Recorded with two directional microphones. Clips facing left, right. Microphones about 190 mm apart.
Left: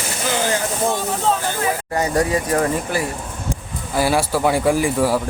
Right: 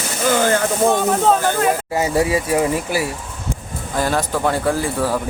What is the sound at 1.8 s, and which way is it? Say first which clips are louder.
Speech: right 1 dB; 5° right (ahead or behind).